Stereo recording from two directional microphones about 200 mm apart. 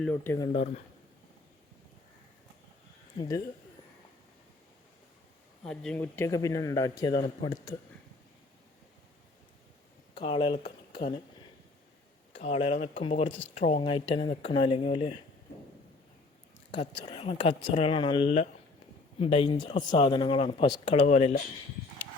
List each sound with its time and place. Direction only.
0.0 s speech: 10° left (ahead or behind)
3.2 s speech: 15° left (ahead or behind)
5.6 s speech: 5° left (ahead or behind)
10.2 s speech: 25° left (ahead or behind)
12.4 s speech: 30° left (ahead or behind)
16.7 s speech: 35° left (ahead or behind)